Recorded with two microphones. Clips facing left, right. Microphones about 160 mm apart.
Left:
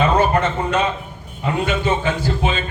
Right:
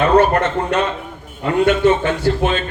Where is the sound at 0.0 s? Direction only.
65° right (ahead or behind).